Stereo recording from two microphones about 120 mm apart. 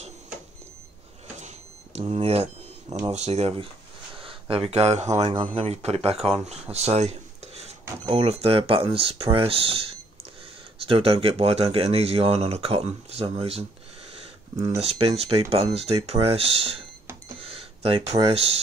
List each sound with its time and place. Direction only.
2.0 s speech: 60° right (ahead or behind)
5.3 s speech: 55° right (ahead or behind)
6.1 s speech: centre (ahead or behind)
6.7 s a sound: 65° right (ahead or behind)
8.1 s speech: 60° right (ahead or behind)
10.9 s speech: 55° right (ahead or behind)
14.8 s speech: 55° right (ahead or behind)
17.4 s cash register: 50° right (ahead or behind)
18.2 s speech: 60° right (ahead or behind)